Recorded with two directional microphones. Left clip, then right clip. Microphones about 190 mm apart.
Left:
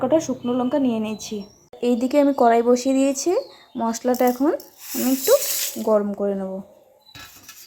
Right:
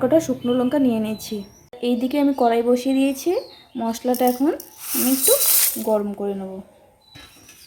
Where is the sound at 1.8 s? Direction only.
20° left (ahead or behind).